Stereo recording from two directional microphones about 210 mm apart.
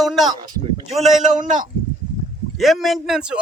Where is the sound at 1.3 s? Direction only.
35° right (ahead or behind).